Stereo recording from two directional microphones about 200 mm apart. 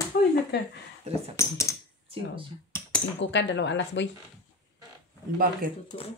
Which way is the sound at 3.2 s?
60° left (ahead or behind).